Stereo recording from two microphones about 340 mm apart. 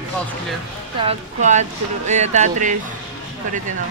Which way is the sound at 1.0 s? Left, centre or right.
Centre.